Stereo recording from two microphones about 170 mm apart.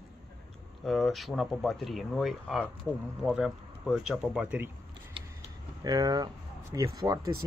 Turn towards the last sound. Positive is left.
turn(degrees=-20)  # may be behind; listen again after turning